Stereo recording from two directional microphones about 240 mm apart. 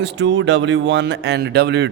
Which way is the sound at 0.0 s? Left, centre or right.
Right.